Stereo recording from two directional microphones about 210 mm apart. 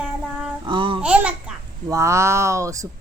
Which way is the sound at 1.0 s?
5° right (ahead or behind).